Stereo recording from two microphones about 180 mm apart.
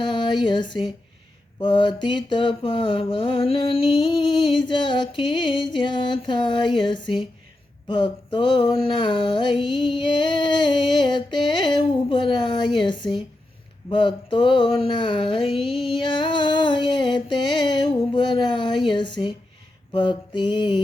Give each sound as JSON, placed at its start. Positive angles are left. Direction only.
{"t": 0.0, "sound": "mantra", "side_deg": 25}